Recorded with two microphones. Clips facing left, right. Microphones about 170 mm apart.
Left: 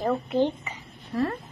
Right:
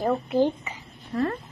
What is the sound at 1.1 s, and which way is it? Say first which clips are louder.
Speech: right 1 dB; 10° left (ahead or behind).